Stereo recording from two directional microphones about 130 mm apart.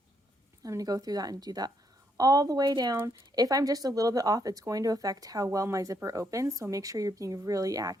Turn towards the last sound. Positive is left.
turn(degrees=-25)  # may be behind; listen again after turning